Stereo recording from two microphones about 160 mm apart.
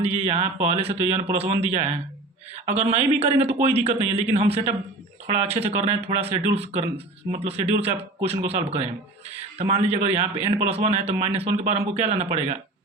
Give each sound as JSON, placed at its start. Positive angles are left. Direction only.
{"t": 0.0, "sound": "a man's voice", "side_deg": -40}